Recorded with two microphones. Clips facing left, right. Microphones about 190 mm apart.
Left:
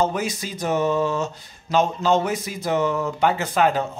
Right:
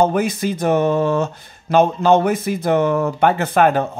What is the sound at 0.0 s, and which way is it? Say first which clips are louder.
Speech: right 6 dB; 55° right (ahead or behind).